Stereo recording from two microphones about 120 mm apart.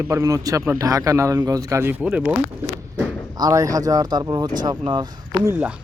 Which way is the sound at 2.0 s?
10° right (ahead or behind).